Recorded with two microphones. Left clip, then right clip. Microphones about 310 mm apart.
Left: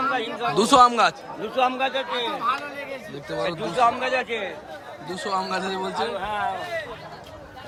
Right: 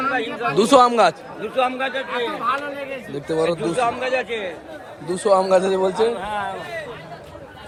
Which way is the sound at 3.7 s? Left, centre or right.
Left.